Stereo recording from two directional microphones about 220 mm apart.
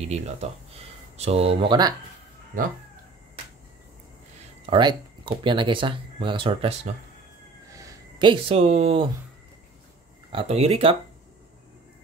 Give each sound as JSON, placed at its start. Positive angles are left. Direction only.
{"t": 0.0, "sound": "speech", "side_deg": -30}
{"t": 4.6, "sound": "speech", "side_deg": -20}
{"t": 10.3, "sound": "speech", "side_deg": -30}